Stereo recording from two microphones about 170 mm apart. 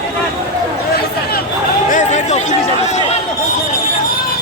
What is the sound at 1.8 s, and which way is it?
Speech, 45° left (ahead or behind).